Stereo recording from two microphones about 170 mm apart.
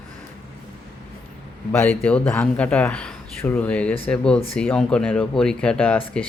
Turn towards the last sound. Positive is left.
turn(degrees=10)  # may be behind; listen again after turning